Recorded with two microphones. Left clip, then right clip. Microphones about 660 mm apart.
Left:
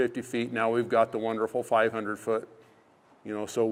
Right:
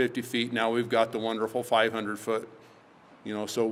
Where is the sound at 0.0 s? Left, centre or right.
Left.